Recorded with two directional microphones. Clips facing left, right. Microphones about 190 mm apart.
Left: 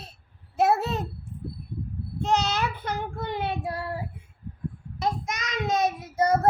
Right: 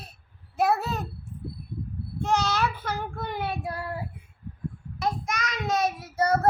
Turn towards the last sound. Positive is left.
turn(degrees=20)  # may be behind; listen again after turning